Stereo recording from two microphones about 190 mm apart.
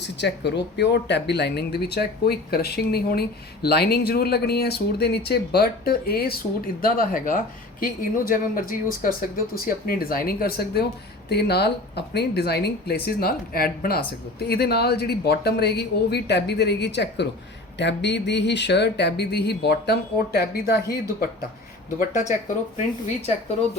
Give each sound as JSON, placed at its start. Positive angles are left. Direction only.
{"t": 0.2, "sound": "speech", "side_deg": 65}
{"t": 21.9, "sound": "speech", "side_deg": 40}